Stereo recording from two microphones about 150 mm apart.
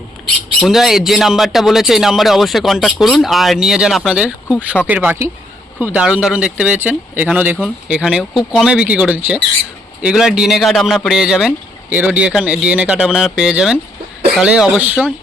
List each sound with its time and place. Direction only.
0.6 s speech: centre (ahead or behind)